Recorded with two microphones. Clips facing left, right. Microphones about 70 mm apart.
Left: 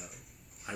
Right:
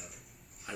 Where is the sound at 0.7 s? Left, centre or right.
Centre.